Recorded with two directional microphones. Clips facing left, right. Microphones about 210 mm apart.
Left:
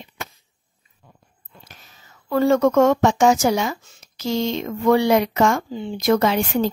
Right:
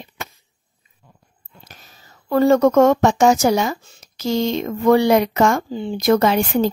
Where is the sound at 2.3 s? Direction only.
40° right (ahead or behind).